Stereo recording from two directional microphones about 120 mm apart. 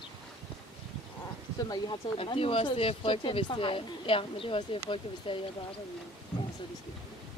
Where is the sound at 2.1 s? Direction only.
50° left (ahead or behind).